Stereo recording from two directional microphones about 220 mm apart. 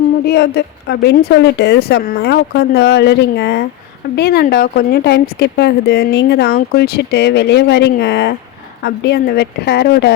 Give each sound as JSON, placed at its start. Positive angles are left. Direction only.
{"t": 0.3, "sound": "speech", "side_deg": 50}